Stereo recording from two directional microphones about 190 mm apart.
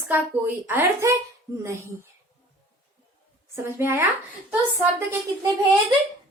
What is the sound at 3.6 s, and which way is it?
Speech, 10° right (ahead or behind).